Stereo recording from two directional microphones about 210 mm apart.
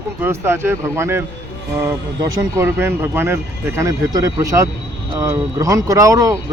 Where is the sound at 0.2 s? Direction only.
10° right (ahead or behind).